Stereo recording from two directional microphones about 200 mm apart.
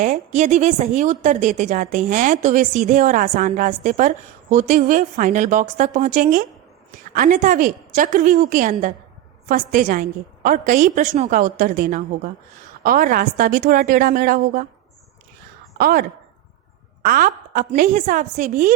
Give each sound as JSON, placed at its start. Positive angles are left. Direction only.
{"t": 0.0, "sound": "a woman's voice", "side_deg": -40}
{"t": 15.8, "sound": "a woman's voice", "side_deg": -45}